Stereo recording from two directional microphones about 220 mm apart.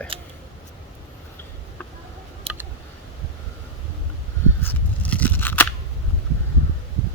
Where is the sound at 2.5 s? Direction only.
25° right (ahead or behind).